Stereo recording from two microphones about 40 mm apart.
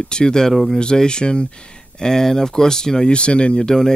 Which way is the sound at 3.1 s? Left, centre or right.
Left.